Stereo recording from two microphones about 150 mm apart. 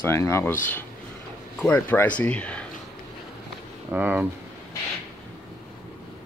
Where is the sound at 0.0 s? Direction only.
20° left (ahead or behind).